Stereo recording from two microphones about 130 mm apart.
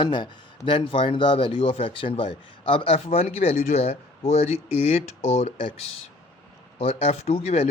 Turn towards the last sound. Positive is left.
turn(degrees=50)  # may be behind; listen again after turning